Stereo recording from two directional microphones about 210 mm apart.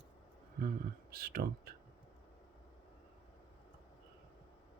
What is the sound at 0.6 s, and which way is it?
Speech, 40° right (ahead or behind).